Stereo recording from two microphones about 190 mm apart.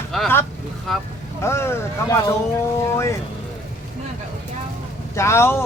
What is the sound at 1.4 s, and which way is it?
Speech, 15° left (ahead or behind).